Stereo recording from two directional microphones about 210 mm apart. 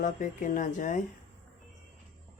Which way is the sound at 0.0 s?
35° left (ahead or behind).